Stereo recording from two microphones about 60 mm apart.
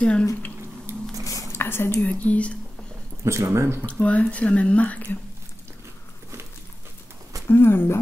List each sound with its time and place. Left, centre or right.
0.0 s speech: centre
0.9 s a sound: right
1.5 s whispering: left
2.0 s speech: left
3.3 s speech: right
3.8 s speech: left
7.4 s speech: left